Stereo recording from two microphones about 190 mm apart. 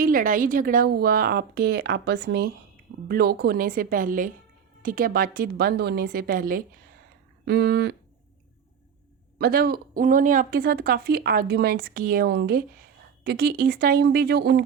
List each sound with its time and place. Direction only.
0.0 s speech: 45° right (ahead or behind)
9.4 s speech: 50° right (ahead or behind)